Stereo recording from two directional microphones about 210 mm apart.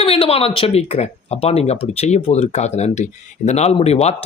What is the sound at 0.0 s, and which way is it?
Speech, 25° left (ahead or behind).